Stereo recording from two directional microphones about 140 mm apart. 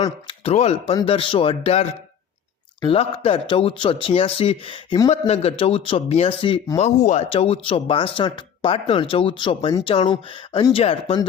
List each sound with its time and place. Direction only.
0.0 s speech: 45° left (ahead or behind)
1.0 s a man's voice: 40° left (ahead or behind)
5.2 s a man's voice: 50° left (ahead or behind)
6.7 s a man's voice: 55° left (ahead or behind)
7.3 s speech: 40° left (ahead or behind)